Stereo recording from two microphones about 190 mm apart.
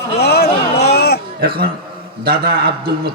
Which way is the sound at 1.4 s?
50° right (ahead or behind).